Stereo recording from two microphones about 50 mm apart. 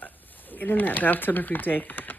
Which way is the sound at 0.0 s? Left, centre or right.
Left.